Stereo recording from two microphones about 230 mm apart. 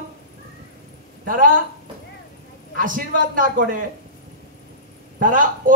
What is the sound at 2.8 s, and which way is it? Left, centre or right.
A man's voice, right.